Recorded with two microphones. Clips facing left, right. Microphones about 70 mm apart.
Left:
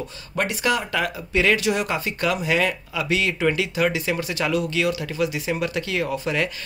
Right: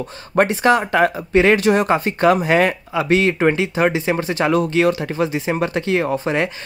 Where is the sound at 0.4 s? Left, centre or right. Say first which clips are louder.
Right 8 dB; right.